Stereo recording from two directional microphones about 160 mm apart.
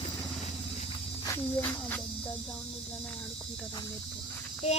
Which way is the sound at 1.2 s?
15° left (ahead or behind).